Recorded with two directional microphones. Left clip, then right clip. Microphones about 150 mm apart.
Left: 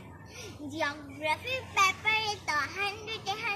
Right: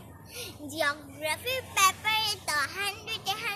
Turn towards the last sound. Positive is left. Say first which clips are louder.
# right 1 dB
turn(degrees=-40)  # may be behind; listen again after turning